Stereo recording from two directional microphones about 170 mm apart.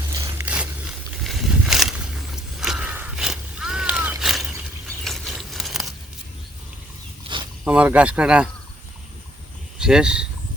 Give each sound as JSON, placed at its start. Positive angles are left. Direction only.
{"t": 0.1, "sound": "a sound", "side_deg": -20}
{"t": 1.2, "sound": "vehicle", "side_deg": 0}
{"t": 5.0, "sound": "biting", "side_deg": 0}
{"t": 7.3, "sound": "a sound", "side_deg": -35}
{"t": 7.6, "sound": "speech", "side_deg": -5}
{"t": 9.7, "sound": "speech", "side_deg": -5}